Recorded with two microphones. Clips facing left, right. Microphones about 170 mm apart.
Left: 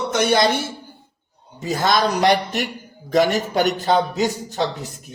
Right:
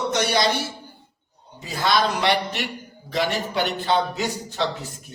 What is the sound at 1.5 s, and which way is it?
A man's voice, 45° left (ahead or behind).